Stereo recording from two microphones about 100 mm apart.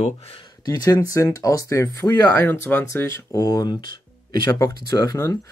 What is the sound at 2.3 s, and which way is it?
Speech, 25° left (ahead or behind).